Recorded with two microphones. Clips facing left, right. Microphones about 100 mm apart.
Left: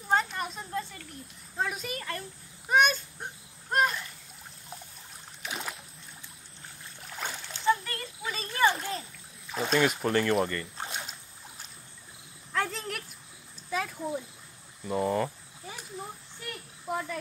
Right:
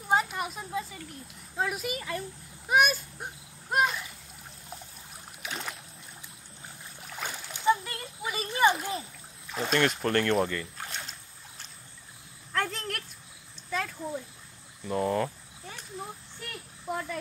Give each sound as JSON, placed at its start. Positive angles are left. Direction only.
{"t": 0.1, "sound": "a sound", "side_deg": -5}
{"t": 1.6, "sound": "speech", "side_deg": -5}
{"t": 2.7, "sound": "a sound", "side_deg": -5}
{"t": 3.7, "sound": "splash", "side_deg": -5}
{"t": 5.4, "sound": "boat", "side_deg": 0}
{"t": 7.0, "sound": "boat", "side_deg": 0}
{"t": 7.5, "sound": "splash", "side_deg": -15}
{"t": 9.5, "sound": "speech", "side_deg": 0}
{"t": 10.9, "sound": "a sound", "side_deg": 10}
{"t": 14.9, "sound": "cricket", "side_deg": 0}
{"t": 16.8, "sound": "insect", "side_deg": 0}